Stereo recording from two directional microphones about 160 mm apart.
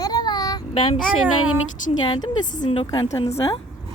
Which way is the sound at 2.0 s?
25° left (ahead or behind).